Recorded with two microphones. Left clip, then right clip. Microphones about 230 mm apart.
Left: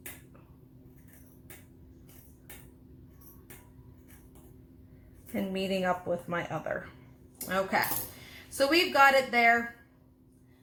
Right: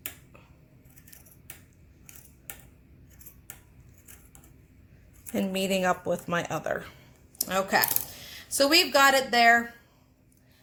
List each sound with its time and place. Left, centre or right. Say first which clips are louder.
5.3 s speech: right 4 dB; right